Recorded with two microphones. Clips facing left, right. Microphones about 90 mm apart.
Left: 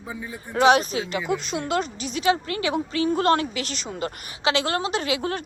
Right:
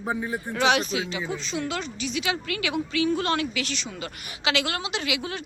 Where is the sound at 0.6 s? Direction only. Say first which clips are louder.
Left 5 dB; 40° left (ahead or behind).